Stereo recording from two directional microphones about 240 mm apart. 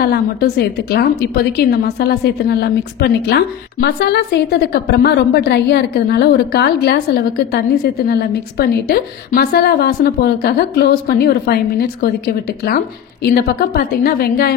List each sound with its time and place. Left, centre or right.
0.0 s a woman's voice: left